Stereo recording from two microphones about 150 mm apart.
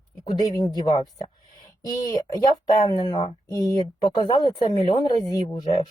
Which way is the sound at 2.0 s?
25° left (ahead or behind).